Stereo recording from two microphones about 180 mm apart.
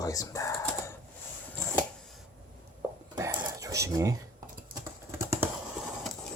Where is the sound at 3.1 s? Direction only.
15° right (ahead or behind).